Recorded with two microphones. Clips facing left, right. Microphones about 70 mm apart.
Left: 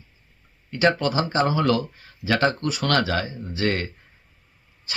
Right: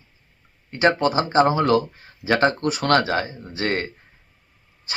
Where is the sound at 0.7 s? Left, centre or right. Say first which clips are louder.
Right 2 dB; right.